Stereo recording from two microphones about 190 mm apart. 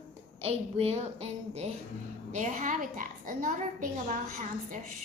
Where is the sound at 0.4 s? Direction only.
35° right (ahead or behind).